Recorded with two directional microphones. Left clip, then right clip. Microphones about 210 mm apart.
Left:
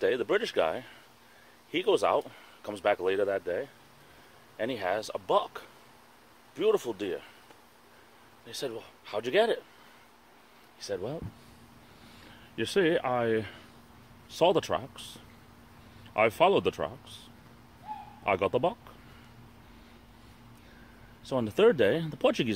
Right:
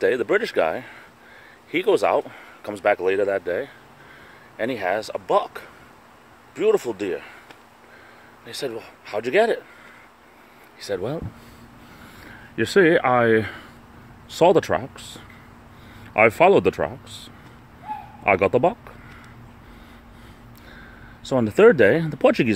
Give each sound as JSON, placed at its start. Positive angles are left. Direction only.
{"t": 0.0, "sound": "speech", "side_deg": -10}
{"t": 8.5, "sound": "speech", "side_deg": -10}
{"t": 10.8, "sound": "speech", "side_deg": -15}
{"t": 12.5, "sound": "speech", "side_deg": -15}
{"t": 21.2, "sound": "speech", "side_deg": -15}